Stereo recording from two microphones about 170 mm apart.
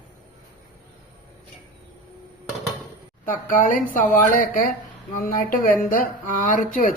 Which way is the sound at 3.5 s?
50° left (ahead or behind).